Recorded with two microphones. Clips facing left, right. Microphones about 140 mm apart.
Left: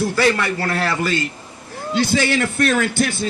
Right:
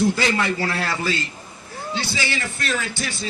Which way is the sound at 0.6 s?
55° left (ahead or behind).